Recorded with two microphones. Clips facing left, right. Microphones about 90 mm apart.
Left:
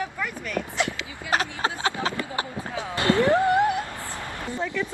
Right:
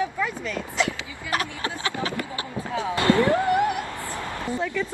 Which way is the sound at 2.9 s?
25° left (ahead or behind).